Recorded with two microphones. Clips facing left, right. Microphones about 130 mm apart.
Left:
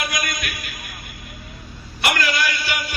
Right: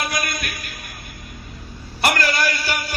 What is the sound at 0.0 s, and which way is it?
Music, 35° right (ahead or behind).